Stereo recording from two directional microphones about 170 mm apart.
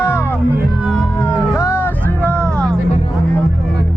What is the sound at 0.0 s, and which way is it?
Music, 15° left (ahead or behind).